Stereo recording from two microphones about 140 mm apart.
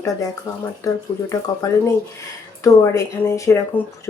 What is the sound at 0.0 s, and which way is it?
Speech, 25° left (ahead or behind).